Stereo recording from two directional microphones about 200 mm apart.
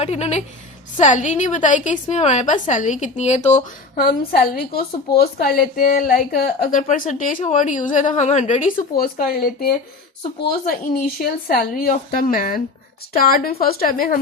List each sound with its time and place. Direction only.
0.0 s a woman's voice: 30° left (ahead or behind)
3.9 s a woman's voice: 50° left (ahead or behind)
9.0 s a woman's voice: 50° left (ahead or behind)
10.9 s a woman's voice: 45° left (ahead or behind)